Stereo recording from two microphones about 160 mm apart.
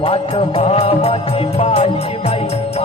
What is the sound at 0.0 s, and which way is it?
Music, 35° left (ahead or behind).